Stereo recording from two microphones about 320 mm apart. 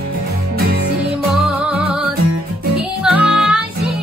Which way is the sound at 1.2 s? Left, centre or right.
Centre.